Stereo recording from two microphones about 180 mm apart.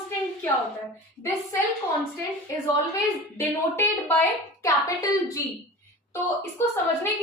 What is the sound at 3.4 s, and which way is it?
A woman's voice, 10° left (ahead or behind).